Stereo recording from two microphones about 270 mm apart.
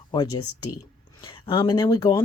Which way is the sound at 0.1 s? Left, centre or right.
Centre.